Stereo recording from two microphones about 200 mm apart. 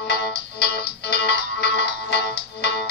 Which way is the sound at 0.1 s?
55° left (ahead or behind).